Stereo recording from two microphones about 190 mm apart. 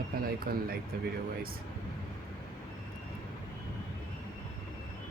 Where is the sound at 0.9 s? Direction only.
50° right (ahead or behind).